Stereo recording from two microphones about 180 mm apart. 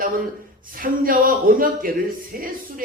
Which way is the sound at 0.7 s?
50° right (ahead or behind).